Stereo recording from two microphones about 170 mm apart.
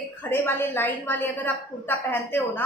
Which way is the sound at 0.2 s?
10° left (ahead or behind).